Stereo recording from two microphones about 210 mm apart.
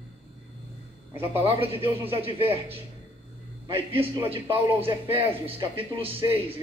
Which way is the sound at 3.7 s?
25° right (ahead or behind).